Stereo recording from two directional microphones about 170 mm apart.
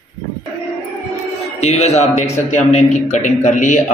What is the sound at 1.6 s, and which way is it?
A man's voice, 40° left (ahead or behind).